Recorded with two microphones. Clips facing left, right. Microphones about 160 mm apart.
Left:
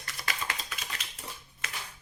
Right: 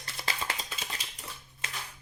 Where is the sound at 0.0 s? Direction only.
30° right (ahead or behind).